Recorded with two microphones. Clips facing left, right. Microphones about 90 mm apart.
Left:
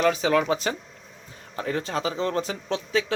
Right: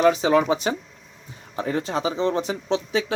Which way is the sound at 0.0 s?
25° right (ahead or behind).